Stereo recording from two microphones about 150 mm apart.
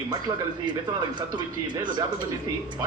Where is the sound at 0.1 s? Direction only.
30° right (ahead or behind).